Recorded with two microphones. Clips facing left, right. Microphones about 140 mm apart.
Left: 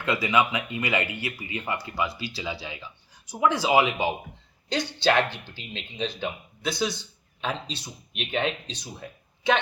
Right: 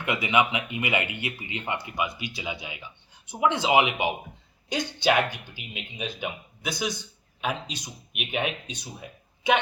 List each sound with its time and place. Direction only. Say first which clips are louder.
0.0 s speech: left 1 dB; 20° right (ahead or behind)
4.8 s speech: right 2 dB; 50° right (ahead or behind)
5.5 s speech: left 1 dB; 15° right (ahead or behind)
9.0 s a sound: left 2 dB; 15° right (ahead or behind)